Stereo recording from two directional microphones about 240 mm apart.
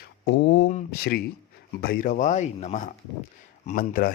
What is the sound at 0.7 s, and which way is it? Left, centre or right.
Speech, left.